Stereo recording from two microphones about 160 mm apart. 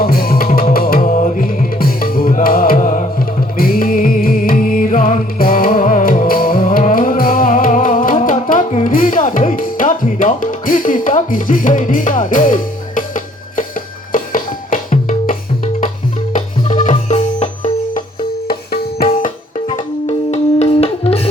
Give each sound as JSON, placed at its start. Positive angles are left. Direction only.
{"t": 0.0, "sound": "tabla", "side_deg": 65}
{"t": 1.1, "sound": "music", "side_deg": 60}
{"t": 16.8, "sound": "music", "side_deg": 40}
{"t": 18.4, "sound": "music", "side_deg": 70}
{"t": 19.0, "sound": "music", "side_deg": 40}